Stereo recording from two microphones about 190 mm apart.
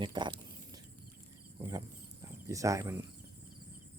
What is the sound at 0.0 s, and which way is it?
Speech, 25° right (ahead or behind).